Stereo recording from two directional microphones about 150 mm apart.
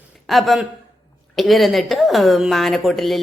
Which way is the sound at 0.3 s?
Centre (ahead or behind).